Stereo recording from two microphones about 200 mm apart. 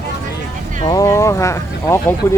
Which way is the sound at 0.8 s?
20° left (ahead or behind).